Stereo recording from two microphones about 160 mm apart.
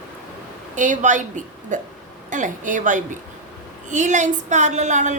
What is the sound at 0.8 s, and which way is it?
A woman's voice, 50° right (ahead or behind).